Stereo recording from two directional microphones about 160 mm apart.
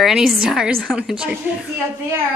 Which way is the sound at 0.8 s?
Centre (ahead or behind).